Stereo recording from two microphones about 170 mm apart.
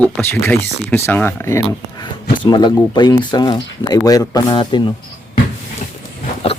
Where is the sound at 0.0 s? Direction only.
10° left (ahead or behind).